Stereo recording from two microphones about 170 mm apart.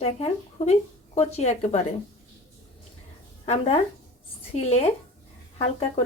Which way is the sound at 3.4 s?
35° left (ahead or behind).